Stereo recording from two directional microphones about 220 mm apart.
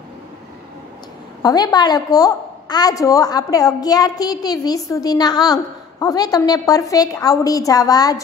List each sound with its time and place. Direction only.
1.4 s a woman's voice: 20° left (ahead or behind)